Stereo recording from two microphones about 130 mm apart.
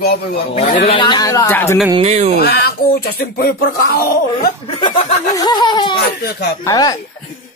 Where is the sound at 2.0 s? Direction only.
60° right (ahead or behind).